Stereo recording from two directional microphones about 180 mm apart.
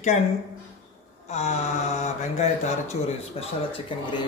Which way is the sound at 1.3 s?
40° left (ahead or behind).